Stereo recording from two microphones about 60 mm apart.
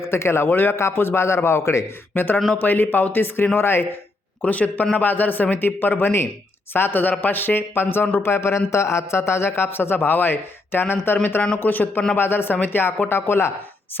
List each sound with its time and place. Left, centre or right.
0.0 s a man's voice: left
4.4 s a man's voice: left